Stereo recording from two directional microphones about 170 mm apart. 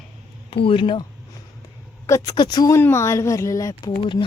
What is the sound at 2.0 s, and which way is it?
A woman's voice, 20° left (ahead or behind).